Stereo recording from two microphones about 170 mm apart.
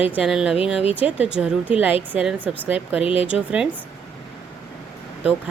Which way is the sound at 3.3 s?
5° right (ahead or behind).